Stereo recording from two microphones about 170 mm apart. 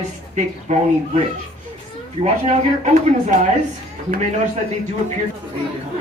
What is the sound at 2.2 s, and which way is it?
Speech, 40° right (ahead or behind).